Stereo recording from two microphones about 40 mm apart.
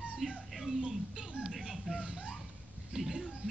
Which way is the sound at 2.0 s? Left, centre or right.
Right.